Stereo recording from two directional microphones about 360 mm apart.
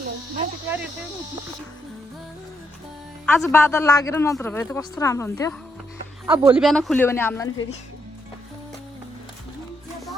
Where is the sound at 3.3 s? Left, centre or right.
Centre.